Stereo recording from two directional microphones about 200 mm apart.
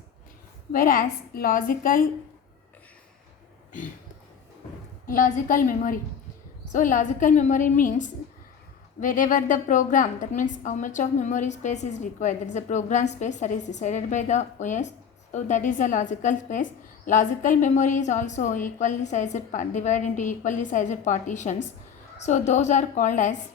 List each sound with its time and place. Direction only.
0.7 s a woman's voice: 45° left (ahead or behind)
5.0 s a woman's voice: 40° left (ahead or behind)